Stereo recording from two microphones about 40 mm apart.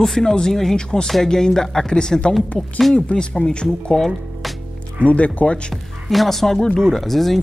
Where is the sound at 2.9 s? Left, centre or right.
Left.